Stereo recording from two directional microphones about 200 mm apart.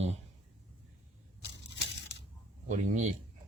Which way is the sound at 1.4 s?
60° left (ahead or behind).